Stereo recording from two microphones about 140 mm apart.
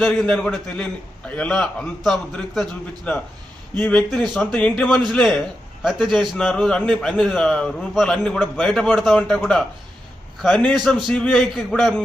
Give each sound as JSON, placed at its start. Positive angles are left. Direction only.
{"t": 0.0, "sound": "a man's voice", "side_deg": 5}